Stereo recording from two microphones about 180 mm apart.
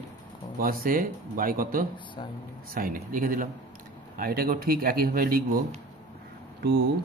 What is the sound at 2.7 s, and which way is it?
Speech, 50° right (ahead or behind).